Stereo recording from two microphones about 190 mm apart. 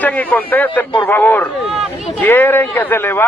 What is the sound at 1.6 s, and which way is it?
Speech, centre (ahead or behind).